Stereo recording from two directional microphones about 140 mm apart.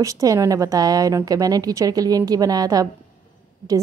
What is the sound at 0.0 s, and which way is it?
A woman's voice, 25° right (ahead or behind).